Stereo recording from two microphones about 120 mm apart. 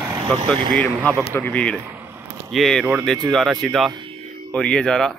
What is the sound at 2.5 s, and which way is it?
Speech, centre (ahead or behind).